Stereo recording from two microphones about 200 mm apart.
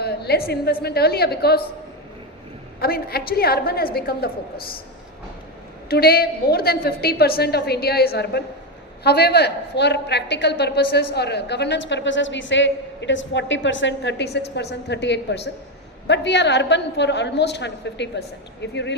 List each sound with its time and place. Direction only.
0.0 s a woman's voice: 55° left (ahead or behind)
2.8 s a woman's voice: 50° left (ahead or behind)
5.9 s a woman's voice: 50° left (ahead or behind)